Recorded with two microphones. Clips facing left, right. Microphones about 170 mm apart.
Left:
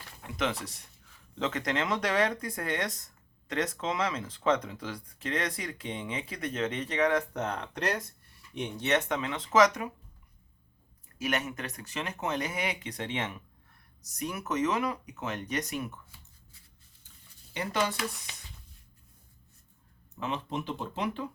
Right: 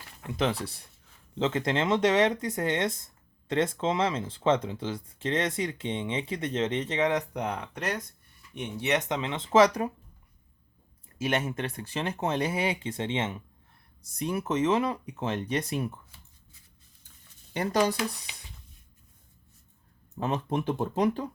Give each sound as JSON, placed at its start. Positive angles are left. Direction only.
{"t": 0.3, "sound": "speech", "side_deg": -30}
{"t": 8.5, "sound": "speech", "side_deg": -10}
{"t": 11.2, "sound": "speech", "side_deg": -30}
{"t": 17.5, "sound": "speech", "side_deg": -45}
{"t": 17.9, "sound": "speech", "side_deg": -15}
{"t": 20.1, "sound": "speech", "side_deg": -40}